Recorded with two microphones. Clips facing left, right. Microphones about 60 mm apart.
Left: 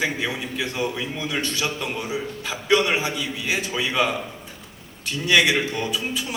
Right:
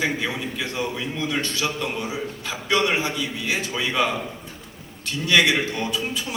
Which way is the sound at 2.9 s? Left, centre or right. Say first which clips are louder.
Even; centre.